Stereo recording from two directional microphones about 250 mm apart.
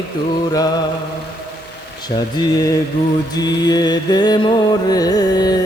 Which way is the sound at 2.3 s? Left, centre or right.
Centre.